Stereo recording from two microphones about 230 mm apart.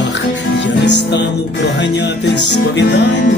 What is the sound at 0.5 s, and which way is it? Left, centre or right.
Music, left.